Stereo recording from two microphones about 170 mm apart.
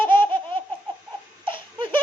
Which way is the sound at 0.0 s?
30° right (ahead or behind).